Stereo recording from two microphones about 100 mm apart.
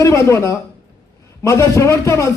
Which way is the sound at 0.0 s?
30° left (ahead or behind).